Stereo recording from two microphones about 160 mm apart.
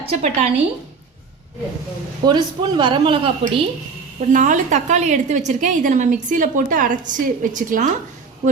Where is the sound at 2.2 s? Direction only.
30° right (ahead or behind).